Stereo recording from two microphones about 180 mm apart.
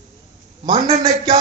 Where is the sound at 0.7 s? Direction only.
35° right (ahead or behind).